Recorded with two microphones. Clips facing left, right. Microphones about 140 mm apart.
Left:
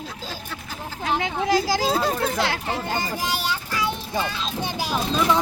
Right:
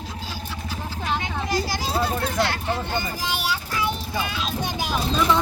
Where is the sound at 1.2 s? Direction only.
90° left.